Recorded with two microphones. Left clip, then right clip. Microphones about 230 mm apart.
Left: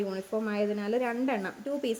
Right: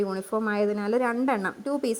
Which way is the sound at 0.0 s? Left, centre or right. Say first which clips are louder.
Right 5 dB; right.